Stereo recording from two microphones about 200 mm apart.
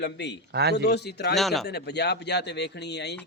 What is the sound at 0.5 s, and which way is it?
Speech, 55° right (ahead or behind).